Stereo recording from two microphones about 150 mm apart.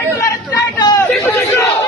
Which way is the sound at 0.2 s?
20° left (ahead or behind).